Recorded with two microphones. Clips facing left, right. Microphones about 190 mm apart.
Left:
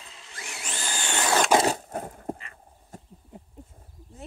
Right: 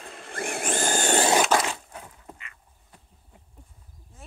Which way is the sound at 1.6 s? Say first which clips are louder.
Left 7 dB; 45° left (ahead or behind).